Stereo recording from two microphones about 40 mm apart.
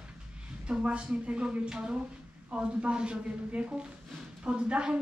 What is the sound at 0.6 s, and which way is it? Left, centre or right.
Speech, right.